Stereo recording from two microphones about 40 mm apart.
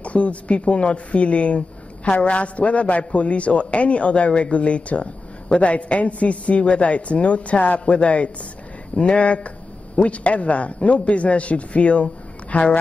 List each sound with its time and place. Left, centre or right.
0.0 s a woman's voice: left